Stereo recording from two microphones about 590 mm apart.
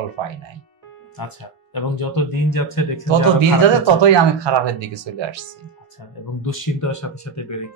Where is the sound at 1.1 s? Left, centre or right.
Left.